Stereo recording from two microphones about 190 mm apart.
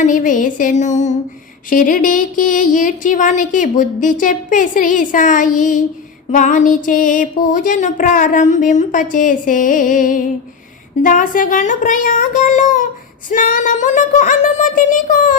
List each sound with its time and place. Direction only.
0.0 s speech: 45° left (ahead or behind)